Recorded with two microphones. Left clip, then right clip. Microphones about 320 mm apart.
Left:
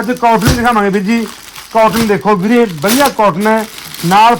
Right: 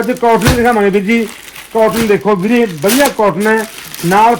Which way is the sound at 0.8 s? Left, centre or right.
Centre.